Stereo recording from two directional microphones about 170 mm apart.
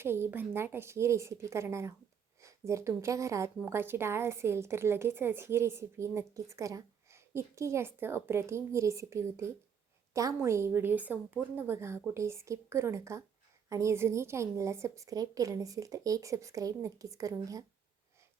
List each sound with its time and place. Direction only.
0.0 s a woman's voice: 15° right (ahead or behind)